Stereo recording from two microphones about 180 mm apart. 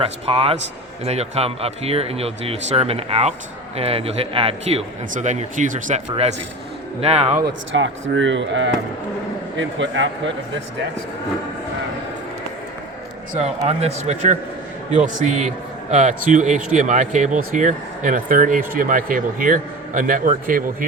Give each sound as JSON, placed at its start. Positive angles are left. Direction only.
{"t": 0.0, "sound": "speech", "side_deg": -30}
{"t": 7.4, "sound": "speech", "side_deg": -90}
{"t": 13.4, "sound": "a man's voice", "side_deg": -35}